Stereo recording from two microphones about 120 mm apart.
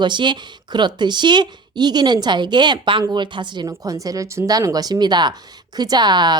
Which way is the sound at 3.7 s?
30° right (ahead or behind).